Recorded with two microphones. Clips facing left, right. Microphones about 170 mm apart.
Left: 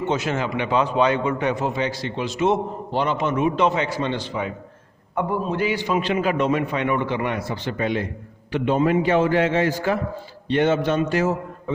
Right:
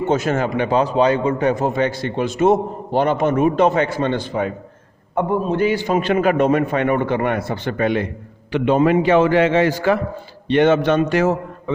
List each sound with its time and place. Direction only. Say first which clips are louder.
0.1 s a man's voice: right 6 dB; 45° right (ahead or behind); by 8.1 s 60° right (ahead or behind)
8.5 s a man's voice: right 4 dB; 90° right; by 11.7 s 75° right (ahead or behind)